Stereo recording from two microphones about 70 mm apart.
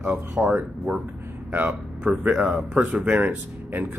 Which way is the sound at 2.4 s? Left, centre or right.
Centre.